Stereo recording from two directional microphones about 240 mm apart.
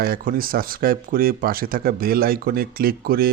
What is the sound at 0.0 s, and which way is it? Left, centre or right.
Speech, right.